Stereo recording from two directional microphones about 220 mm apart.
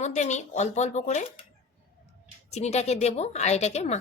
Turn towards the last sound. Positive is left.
turn(degrees=30)  # may be behind; listen again after turning